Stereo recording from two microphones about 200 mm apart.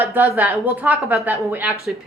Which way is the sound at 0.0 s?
10° right (ahead or behind).